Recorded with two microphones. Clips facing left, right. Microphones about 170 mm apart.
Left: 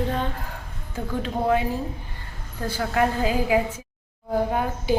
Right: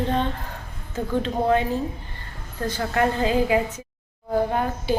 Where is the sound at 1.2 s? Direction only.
5° left (ahead or behind).